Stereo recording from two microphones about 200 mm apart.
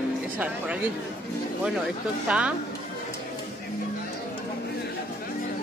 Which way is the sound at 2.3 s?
5° right (ahead or behind).